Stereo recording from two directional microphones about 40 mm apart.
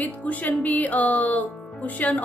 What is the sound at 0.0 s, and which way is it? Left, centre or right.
A woman's voice, left.